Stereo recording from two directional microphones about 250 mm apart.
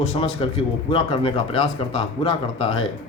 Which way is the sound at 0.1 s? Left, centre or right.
Left.